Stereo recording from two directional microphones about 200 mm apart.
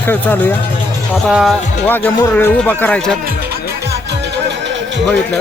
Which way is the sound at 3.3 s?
55° right (ahead or behind).